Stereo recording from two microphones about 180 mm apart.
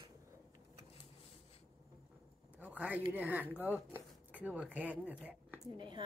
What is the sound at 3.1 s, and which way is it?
Speech, 10° right (ahead or behind).